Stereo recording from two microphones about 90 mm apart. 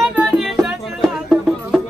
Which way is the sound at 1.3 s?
10° right (ahead or behind).